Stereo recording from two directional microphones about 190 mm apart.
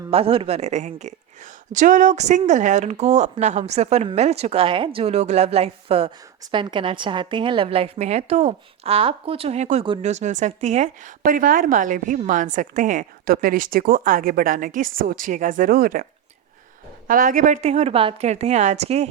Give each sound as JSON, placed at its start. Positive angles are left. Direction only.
{"t": 0.1, "sound": "a woman's voice", "side_deg": -30}
{"t": 17.1, "sound": "speech", "side_deg": -45}